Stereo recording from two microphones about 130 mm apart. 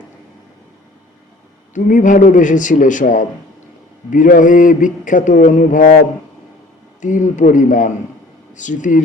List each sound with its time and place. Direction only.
1.7 s a man's voice: 75° left (ahead or behind)
4.1 s mantra: 85° left
7.0 s a man's voice: 75° left (ahead or behind)
8.5 s a man's voice: 75° left (ahead or behind)